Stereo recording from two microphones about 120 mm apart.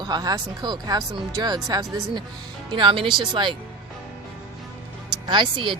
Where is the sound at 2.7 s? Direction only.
45° right (ahead or behind).